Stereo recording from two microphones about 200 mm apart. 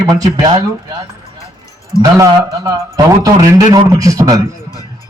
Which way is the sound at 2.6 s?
20° right (ahead or behind).